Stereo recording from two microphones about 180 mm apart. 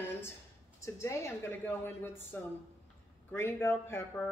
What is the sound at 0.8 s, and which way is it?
A man's voice, 15° left (ahead or behind).